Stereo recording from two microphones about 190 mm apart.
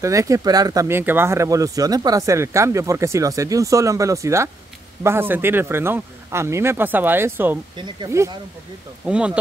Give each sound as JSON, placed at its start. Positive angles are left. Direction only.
{"t": 0.0, "sound": "speech", "side_deg": -15}
{"t": 7.7, "sound": "speech", "side_deg": -25}
{"t": 9.0, "sound": "speech", "side_deg": -5}